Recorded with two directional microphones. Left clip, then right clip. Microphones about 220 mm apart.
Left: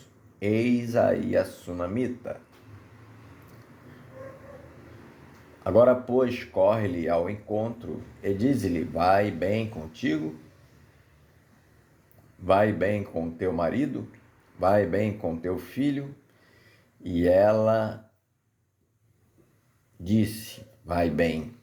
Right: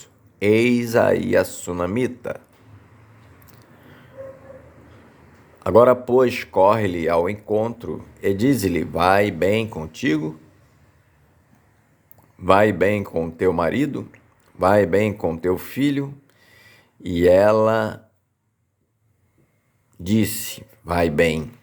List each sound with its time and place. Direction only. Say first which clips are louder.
0.0 s speech: right 9 dB; 40° right (ahead or behind)
5.6 s speech: right 6 dB; 40° right (ahead or behind)
12.5 s speech: right 7 dB; 35° right (ahead or behind)
20.1 s speech: right 6 dB; 40° right (ahead or behind)